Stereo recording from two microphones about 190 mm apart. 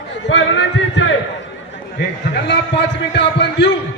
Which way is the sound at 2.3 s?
65° left (ahead or behind).